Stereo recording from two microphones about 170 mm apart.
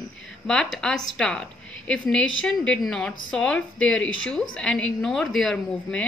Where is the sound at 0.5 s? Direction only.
5° left (ahead or behind).